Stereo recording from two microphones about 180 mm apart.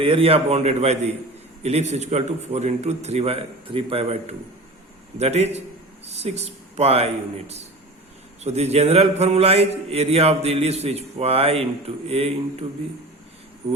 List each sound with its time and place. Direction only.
0.0 s a man's voice: 30° right (ahead or behind)